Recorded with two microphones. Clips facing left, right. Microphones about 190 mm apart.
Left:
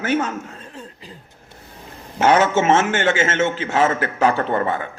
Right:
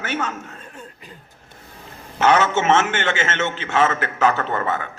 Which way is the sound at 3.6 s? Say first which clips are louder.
Left 1 dB; 30° left (ahead or behind).